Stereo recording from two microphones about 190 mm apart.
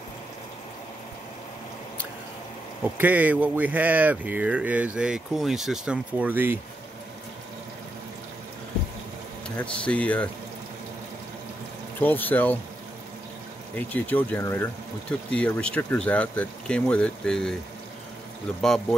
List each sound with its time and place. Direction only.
2.8 s speech: 10° right (ahead or behind)
9.6 s speech: 5° left (ahead or behind)
12.0 s speech: 10° left (ahead or behind)
13.7 s speech: 10° left (ahead or behind)
18.6 s speech: 5° left (ahead or behind)